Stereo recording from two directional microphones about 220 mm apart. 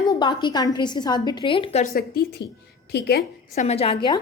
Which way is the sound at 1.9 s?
45° left (ahead or behind).